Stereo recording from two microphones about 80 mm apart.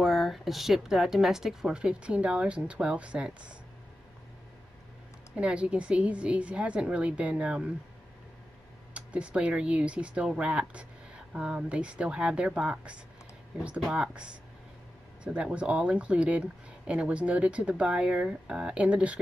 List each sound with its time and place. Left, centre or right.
0.0 s speech: centre
5.3 s speech: centre
8.9 s speech: centre
13.9 s speech: centre